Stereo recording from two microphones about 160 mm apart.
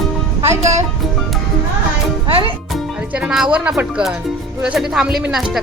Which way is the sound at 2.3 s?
35° right (ahead or behind).